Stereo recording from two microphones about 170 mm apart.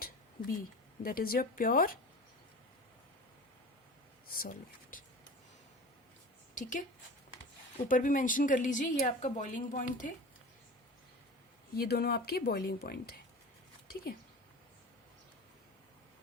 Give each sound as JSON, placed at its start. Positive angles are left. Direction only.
{"t": 0.0, "sound": "a woman's voice", "side_deg": 60}
{"t": 4.3, "sound": "speech", "side_deg": 55}
{"t": 6.5, "sound": "a woman's voice", "side_deg": 50}
{"t": 7.9, "sound": "speech", "side_deg": 50}
{"t": 11.7, "sound": "speech", "side_deg": 70}